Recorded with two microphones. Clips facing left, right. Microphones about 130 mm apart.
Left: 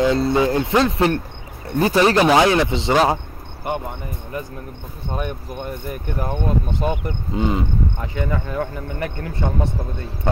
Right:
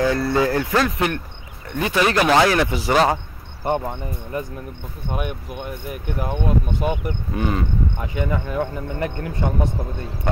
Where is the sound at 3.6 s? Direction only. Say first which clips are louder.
Right 3 dB; 30° right (ahead or behind).